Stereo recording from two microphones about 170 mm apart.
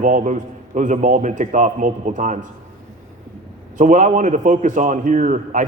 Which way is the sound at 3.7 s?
50° right (ahead or behind).